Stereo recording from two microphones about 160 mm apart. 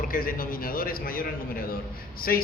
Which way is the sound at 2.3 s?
65° left (ahead or behind).